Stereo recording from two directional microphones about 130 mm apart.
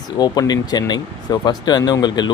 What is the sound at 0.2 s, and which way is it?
Speech, 30° left (ahead or behind).